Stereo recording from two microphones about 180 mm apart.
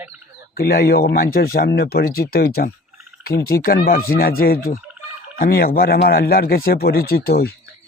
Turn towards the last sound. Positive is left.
turn(degrees=60)  # may be behind; listen again after turning